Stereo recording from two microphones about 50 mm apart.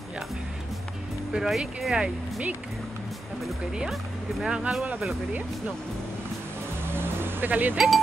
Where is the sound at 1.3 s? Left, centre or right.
Centre.